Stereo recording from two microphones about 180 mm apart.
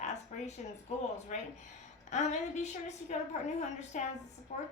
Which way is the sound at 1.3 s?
40° left (ahead or behind).